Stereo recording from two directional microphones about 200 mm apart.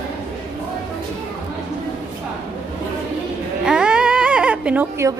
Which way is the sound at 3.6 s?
5° right (ahead or behind).